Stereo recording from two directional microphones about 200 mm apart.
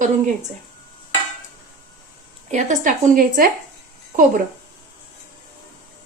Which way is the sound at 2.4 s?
35° right (ahead or behind).